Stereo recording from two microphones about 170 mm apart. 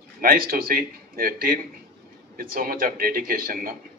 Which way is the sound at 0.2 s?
55° right (ahead or behind).